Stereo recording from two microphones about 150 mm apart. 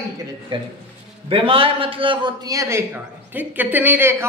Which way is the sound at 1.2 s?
35° right (ahead or behind).